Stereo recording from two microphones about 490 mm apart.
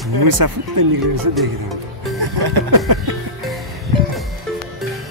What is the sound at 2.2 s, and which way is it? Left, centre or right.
Music, right.